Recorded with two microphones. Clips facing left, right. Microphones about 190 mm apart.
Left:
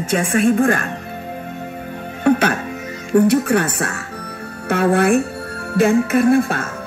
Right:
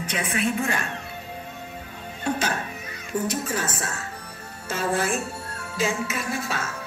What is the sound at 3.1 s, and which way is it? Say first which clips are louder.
A woman's voice: left 13 dB; 65° left (ahead or behind).